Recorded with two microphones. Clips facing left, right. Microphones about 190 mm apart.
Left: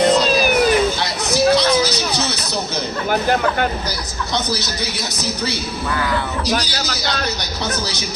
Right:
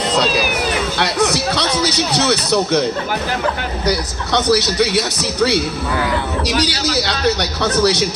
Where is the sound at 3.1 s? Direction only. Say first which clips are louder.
Left 2 dB; 50° left (ahead or behind).